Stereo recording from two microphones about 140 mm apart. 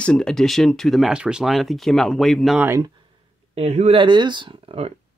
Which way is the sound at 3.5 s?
50° right (ahead or behind).